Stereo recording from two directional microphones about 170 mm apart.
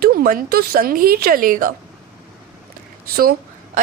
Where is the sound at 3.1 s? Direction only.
60° right (ahead or behind).